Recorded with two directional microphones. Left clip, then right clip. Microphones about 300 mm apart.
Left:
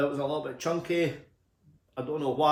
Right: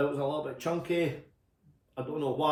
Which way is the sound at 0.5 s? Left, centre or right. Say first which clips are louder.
Left 2 dB; centre.